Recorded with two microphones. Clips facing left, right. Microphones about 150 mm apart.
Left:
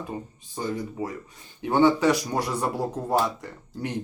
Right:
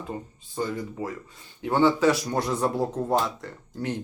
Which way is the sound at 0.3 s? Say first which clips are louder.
Right 1 dB; 15° left (ahead or behind).